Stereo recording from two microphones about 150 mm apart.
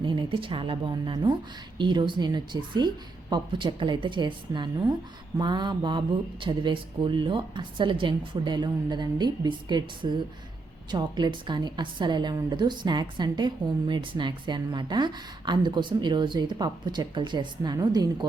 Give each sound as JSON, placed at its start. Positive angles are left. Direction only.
{"t": 0.0, "sound": "a woman's voice", "side_deg": -35}